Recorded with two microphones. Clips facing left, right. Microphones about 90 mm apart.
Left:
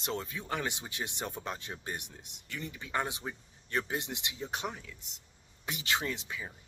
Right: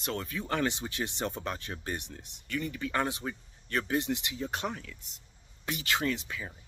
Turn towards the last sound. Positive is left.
turn(degrees=20)  # may be behind; listen again after turning